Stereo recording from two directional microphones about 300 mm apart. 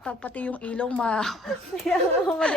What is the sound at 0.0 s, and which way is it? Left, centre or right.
Speech, centre.